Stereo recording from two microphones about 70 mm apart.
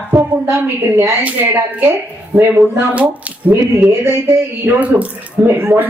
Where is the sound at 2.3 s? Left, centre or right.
Right.